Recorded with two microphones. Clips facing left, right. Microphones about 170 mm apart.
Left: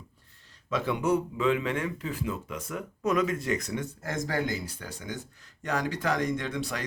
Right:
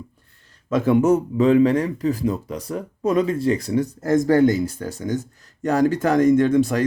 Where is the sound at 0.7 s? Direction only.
45° right (ahead or behind).